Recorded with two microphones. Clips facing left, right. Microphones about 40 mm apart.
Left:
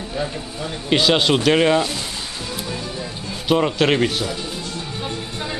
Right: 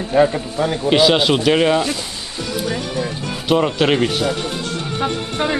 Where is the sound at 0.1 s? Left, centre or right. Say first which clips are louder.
Right 13 dB; right.